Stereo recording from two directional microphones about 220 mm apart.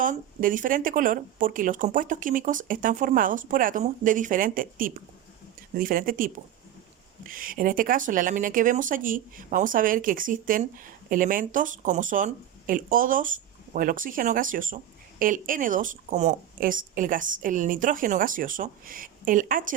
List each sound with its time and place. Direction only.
0.0 s speech: 40° right (ahead or behind)